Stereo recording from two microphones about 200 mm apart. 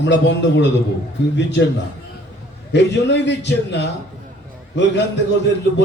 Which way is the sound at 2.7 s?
60° left (ahead or behind).